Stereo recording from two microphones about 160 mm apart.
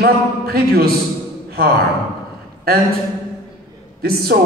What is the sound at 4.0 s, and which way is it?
Speech, 75° right (ahead or behind).